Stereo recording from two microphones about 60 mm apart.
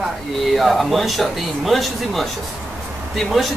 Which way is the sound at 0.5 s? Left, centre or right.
Centre.